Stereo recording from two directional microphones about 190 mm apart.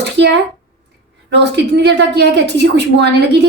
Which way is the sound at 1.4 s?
65° right (ahead or behind).